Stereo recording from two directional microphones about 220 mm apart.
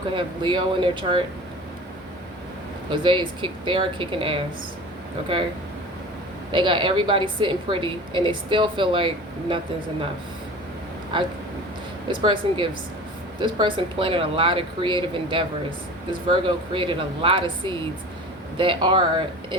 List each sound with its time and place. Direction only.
0.1 s a woman's voice: 20° right (ahead or behind)
2.9 s a woman's voice: 20° right (ahead or behind)
6.5 s a woman's voice: 20° right (ahead or behind)
11.1 s a woman's voice: 20° right (ahead or behind)